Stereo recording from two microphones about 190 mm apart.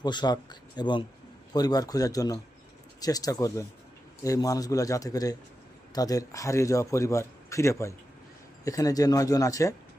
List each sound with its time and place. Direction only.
0.0 s a man's voice: 20° left (ahead or behind)